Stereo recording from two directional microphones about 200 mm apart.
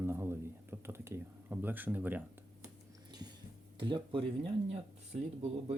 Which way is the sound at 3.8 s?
25° right (ahead or behind).